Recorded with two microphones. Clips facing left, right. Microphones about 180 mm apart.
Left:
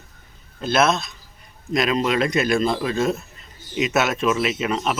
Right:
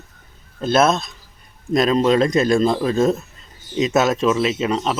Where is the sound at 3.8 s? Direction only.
30° right (ahead or behind).